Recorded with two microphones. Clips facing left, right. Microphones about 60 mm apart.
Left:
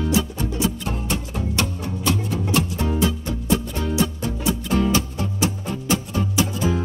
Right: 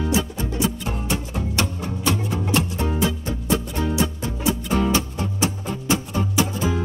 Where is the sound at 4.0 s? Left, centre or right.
Centre.